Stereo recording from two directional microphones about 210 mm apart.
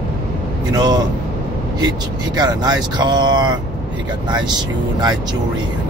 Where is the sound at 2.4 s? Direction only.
20° right (ahead or behind).